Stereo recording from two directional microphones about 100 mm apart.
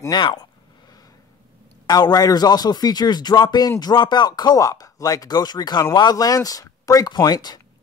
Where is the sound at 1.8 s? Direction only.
45° left (ahead or behind).